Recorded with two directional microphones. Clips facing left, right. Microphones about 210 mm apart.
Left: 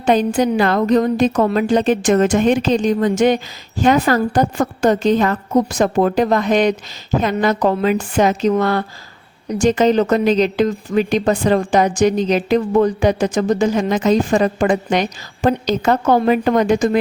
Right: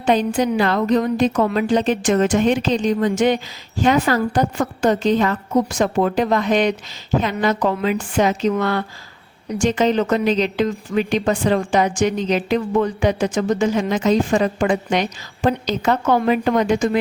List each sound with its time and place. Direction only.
0.0 s a woman's voice: 45° left (ahead or behind)